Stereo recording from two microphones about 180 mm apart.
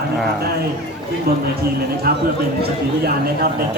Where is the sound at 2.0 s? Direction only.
60° right (ahead or behind).